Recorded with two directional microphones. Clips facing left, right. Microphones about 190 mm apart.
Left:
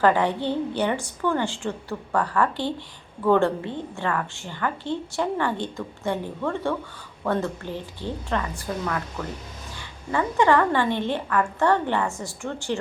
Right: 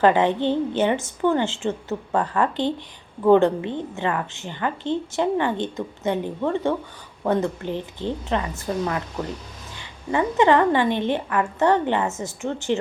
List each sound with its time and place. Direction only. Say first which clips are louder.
0.0 s a woman's voice: right 3 dB; 20° right (ahead or behind)